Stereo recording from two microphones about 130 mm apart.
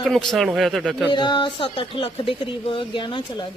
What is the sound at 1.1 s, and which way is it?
Speech, 35° left (ahead or behind).